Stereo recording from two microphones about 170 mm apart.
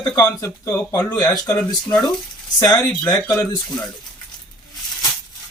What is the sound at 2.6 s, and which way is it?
Speech, 20° left (ahead or behind).